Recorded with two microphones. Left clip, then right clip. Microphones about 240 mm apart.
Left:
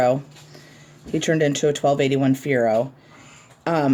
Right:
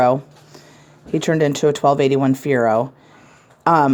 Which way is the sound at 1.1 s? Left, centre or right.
Right.